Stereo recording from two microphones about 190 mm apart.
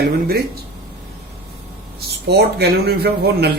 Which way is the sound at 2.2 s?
60° right (ahead or behind).